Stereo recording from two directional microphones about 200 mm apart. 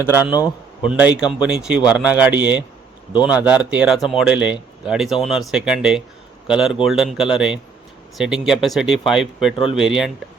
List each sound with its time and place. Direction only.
0.0 s speech: 10° right (ahead or behind)